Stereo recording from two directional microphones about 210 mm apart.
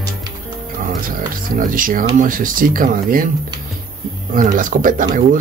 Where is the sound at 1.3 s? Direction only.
40° right (ahead or behind).